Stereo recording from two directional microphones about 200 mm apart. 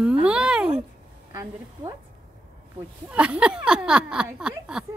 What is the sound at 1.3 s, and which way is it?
Speech, 15° right (ahead or behind).